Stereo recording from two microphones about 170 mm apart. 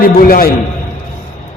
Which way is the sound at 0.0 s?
55° left (ahead or behind).